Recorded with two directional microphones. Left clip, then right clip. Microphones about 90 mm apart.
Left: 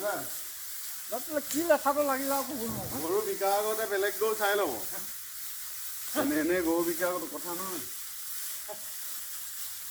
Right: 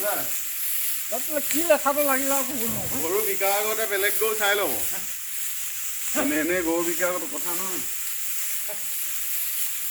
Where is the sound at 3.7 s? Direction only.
55° right (ahead or behind).